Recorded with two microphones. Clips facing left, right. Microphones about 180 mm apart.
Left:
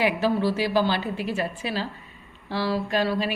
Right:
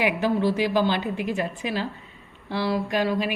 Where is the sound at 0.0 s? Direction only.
15° right (ahead or behind).